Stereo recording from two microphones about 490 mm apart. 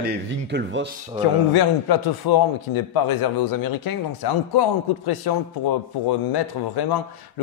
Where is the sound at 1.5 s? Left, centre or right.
Left.